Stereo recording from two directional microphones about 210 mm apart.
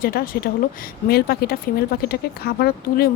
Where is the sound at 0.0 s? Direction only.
45° left (ahead or behind).